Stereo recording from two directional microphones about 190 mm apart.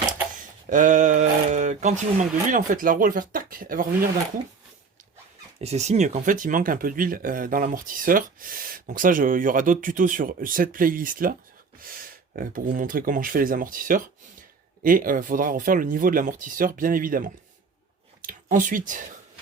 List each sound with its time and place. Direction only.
0.7 s speech: 40° right (ahead or behind)
5.5 s speech: 35° right (ahead or behind)
12.4 s speech: 45° right (ahead or behind)